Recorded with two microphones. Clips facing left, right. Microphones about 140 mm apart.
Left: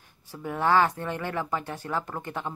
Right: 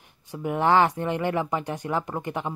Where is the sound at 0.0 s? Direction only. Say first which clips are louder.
Right 5 dB; 20° right (ahead or behind).